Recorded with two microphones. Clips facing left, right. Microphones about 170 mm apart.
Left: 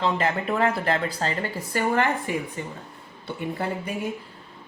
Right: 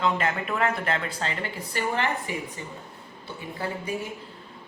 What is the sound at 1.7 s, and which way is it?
Speech, 50° left (ahead or behind).